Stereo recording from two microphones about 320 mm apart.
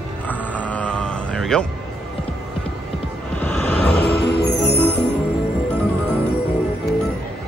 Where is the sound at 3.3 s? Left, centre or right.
Centre.